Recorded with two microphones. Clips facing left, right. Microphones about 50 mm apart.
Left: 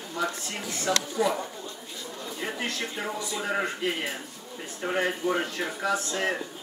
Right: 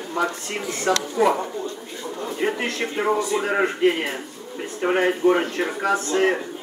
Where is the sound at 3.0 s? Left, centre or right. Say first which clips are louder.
Right 11 dB; right.